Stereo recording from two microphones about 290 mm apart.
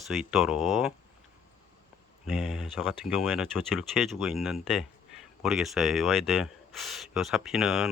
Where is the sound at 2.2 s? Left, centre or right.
Centre.